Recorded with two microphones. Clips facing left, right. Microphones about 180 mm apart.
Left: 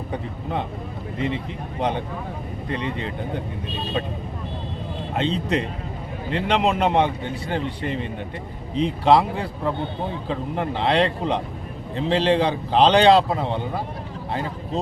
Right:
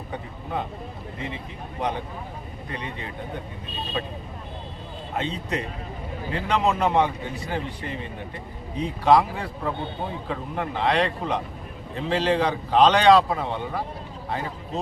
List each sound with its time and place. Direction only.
5.1 s a man's voice: 25° left (ahead or behind)